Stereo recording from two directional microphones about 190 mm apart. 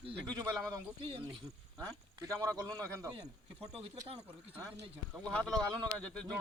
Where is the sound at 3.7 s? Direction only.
35° right (ahead or behind).